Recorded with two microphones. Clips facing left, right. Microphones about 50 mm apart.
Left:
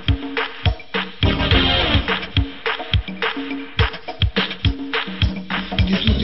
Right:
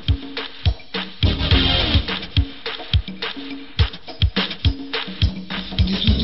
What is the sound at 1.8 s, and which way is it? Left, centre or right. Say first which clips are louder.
Music: left 3 dB; left.